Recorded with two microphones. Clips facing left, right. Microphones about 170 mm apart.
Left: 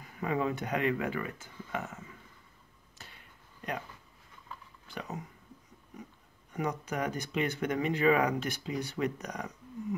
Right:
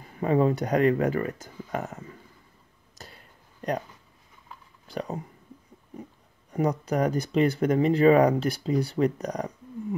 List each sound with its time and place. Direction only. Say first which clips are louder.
0.0 s speech: right 9 dB; 35° right (ahead or behind)
3.0 s a sound: right 6 dB; 40° right (ahead or behind)
4.8 s speech: right 8 dB; 35° right (ahead or behind)
6.5 s speech: right 8 dB; 35° right (ahead or behind)